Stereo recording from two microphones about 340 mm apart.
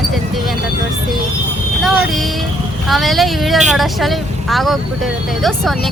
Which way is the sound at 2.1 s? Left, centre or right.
Centre.